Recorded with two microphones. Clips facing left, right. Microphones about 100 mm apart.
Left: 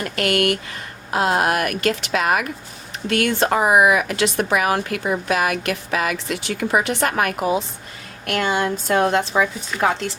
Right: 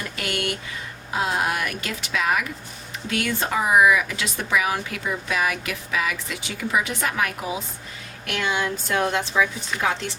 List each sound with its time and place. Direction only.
0.0 s speech: 70° left (ahead or behind)
8.3 s speech: 40° left (ahead or behind)